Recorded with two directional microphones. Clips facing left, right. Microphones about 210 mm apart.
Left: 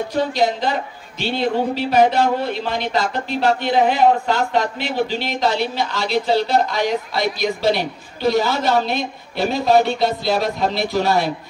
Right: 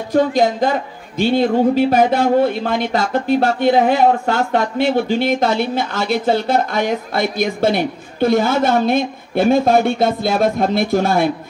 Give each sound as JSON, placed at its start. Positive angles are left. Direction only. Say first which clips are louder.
{"t": 0.1, "sound": "speech", "louder": "right 7 dB", "side_deg": -50}